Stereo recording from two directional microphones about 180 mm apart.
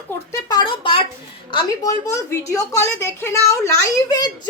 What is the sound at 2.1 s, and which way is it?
A woman's voice, 15° left (ahead or behind).